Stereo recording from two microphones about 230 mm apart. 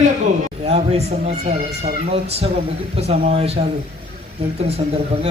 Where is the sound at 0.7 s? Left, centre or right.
Right.